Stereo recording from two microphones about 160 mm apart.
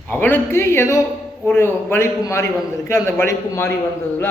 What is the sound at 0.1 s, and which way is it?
A man's voice, 10° left (ahead or behind).